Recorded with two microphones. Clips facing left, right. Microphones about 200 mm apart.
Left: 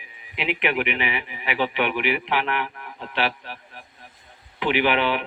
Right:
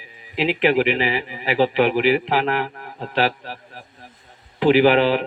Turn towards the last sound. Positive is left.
turn(degrees=-35)  # may be behind; listen again after turning